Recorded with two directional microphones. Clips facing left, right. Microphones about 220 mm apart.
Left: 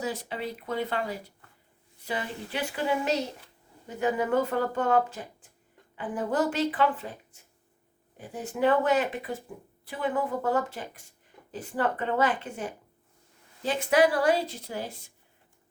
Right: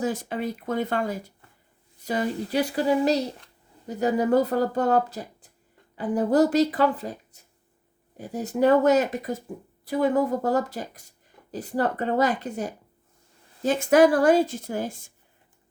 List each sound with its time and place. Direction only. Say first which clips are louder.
0.0 s speech: right 5 dB; 45° right (ahead or behind)